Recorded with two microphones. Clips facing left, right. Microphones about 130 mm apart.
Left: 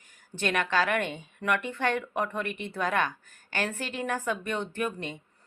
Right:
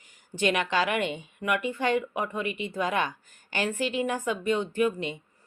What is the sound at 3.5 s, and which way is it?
Speech, 50° left (ahead or behind).